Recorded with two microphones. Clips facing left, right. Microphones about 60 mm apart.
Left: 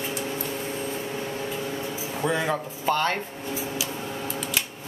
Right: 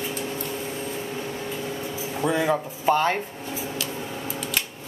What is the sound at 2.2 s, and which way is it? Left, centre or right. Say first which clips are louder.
Speech: right 3 dB; centre.